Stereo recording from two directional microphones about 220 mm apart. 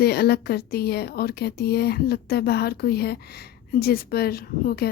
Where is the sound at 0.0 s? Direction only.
45° left (ahead or behind).